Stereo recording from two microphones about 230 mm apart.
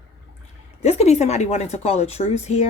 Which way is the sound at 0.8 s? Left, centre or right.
Left.